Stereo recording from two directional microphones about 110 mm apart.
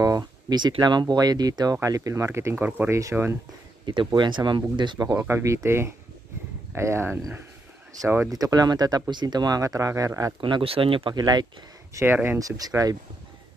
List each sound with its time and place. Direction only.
0.0 s speech: 35° right (ahead or behind)
3.8 s speech: 45° right (ahead or behind)
5.0 s speech: 20° right (ahead or behind)
8.3 s speech: 35° right (ahead or behind)
10.4 s speech: 55° right (ahead or behind)
11.1 s speech: 40° right (ahead or behind)
11.9 s speech: 20° right (ahead or behind)
12.4 s speech: 35° right (ahead or behind)